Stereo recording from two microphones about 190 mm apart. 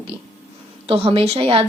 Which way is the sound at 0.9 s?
30° right (ahead or behind).